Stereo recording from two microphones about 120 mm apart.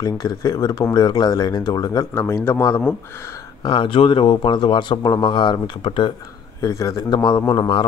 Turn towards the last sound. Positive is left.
turn(degrees=40)  # may be behind; listen again after turning